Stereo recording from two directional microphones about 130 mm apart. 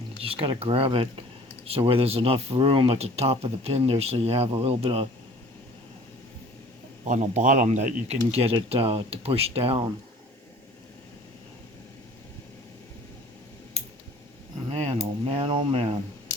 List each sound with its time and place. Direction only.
0.2 s speech: 45° right (ahead or behind)
7.0 s speech: 65° right (ahead or behind)
8.3 s speech: 50° right (ahead or behind)
14.7 s speech: 50° right (ahead or behind)